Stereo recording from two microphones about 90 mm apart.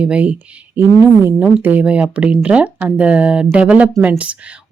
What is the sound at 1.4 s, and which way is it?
Speech, 20° right (ahead or behind).